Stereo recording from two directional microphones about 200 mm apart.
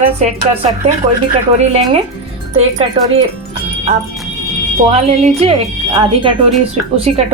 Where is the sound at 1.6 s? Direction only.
30° right (ahead or behind).